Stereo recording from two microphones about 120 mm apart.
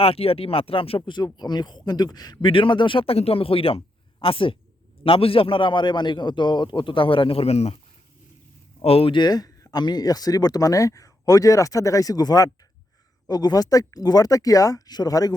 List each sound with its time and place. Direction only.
0.0 s speech: 55° left (ahead or behind)
8.8 s speech: 55° left (ahead or behind)
9.1 s speech: 35° left (ahead or behind)